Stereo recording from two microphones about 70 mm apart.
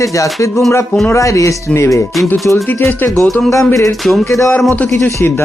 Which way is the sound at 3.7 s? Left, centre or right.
Left.